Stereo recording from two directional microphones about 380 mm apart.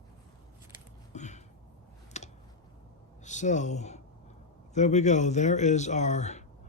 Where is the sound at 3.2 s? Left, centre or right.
Centre.